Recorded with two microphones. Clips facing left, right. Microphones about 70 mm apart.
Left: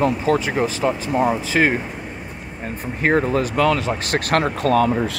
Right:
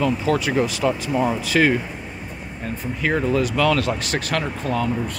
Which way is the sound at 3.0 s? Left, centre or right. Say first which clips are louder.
Left 2 dB; left.